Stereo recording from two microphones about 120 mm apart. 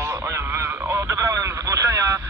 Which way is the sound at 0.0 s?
20° right (ahead or behind).